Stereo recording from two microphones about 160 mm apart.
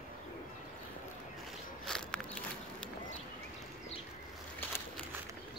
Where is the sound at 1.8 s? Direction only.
5° left (ahead or behind).